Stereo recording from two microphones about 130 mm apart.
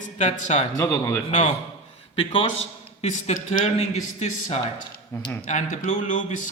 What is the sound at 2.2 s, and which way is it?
Speech, 45° left (ahead or behind).